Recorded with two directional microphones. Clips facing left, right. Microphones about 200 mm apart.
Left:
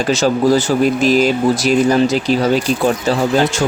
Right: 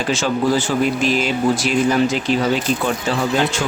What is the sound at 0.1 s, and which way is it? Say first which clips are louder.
Speech: left 5 dB; 40° left (ahead or behind).